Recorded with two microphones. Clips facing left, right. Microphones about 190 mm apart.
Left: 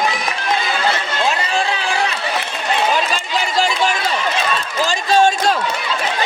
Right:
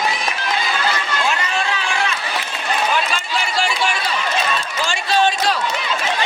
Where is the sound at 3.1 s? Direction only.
40° left (ahead or behind).